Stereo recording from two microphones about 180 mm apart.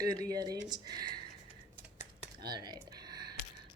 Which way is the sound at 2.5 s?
25° right (ahead or behind).